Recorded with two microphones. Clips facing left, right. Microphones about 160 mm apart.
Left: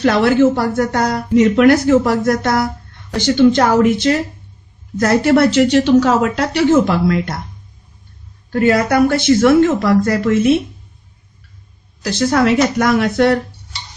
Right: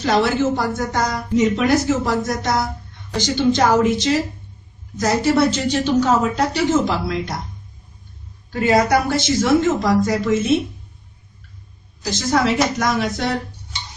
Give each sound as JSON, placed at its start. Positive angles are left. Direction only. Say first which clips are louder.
{"t": 0.0, "sound": "speech", "louder": "left 6 dB", "side_deg": 60}
{"t": 8.5, "sound": "speech", "louder": "left 3 dB", "side_deg": 60}
{"t": 12.0, "sound": "speech", "louder": "left 5 dB", "side_deg": 65}